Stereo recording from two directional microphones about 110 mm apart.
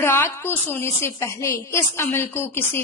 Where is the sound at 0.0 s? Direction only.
25° left (ahead or behind).